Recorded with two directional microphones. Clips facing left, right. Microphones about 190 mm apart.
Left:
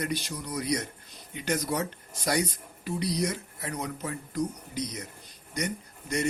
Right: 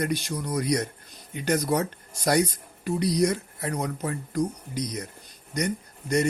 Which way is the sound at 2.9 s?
45° right (ahead or behind).